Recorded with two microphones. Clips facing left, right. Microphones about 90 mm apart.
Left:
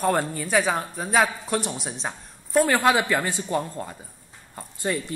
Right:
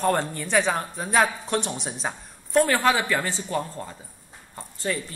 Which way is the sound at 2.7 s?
15° left (ahead or behind).